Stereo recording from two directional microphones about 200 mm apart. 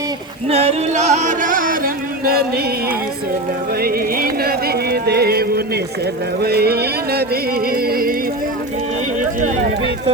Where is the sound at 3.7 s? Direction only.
50° right (ahead or behind).